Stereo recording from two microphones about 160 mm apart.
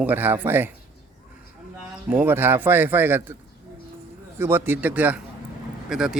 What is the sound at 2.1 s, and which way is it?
Speech, 10° right (ahead or behind).